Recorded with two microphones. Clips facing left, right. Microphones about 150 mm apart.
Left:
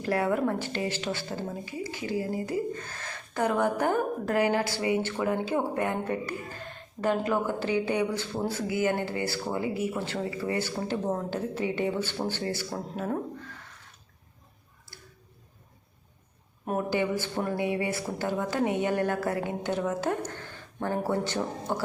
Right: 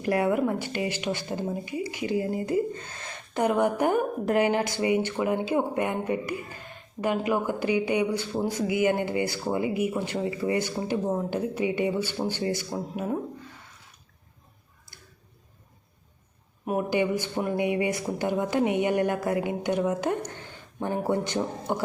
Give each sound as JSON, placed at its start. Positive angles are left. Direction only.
{"t": 0.0, "sound": "speech", "side_deg": -15}
{"t": 16.6, "sound": "speech", "side_deg": -15}